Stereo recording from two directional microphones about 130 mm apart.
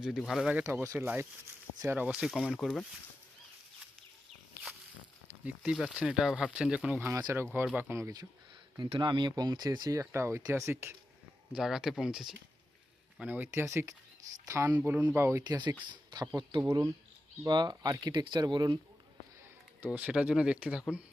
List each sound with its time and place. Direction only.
0.0 s speech: 5° right (ahead or behind)
0.6 s speech: 20° right (ahead or behind); by 2.8 s centre (ahead or behind)
5.5 s speech: 5° right (ahead or behind)
7.1 s speech: 25° right (ahead or behind)
8.8 s speech: 35° right (ahead or behind); by 10.9 s 20° right (ahead or behind)
11.5 s speech: 5° right (ahead or behind); by 18.8 s 35° right (ahead or behind)
19.8 s speech: 10° right (ahead or behind)